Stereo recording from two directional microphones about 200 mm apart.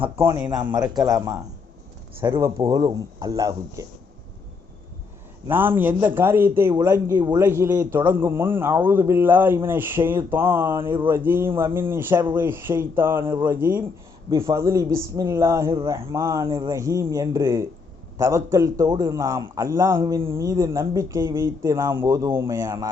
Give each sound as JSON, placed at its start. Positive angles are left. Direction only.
{"t": 0.2, "sound": "a man's voice", "side_deg": -10}
{"t": 5.5, "sound": "a man's voice", "side_deg": -10}